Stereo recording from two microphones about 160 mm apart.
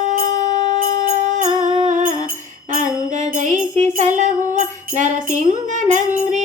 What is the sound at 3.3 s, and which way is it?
Music, 50° right (ahead or behind).